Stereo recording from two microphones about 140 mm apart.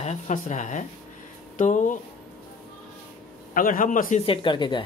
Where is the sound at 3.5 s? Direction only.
75° left (ahead or behind).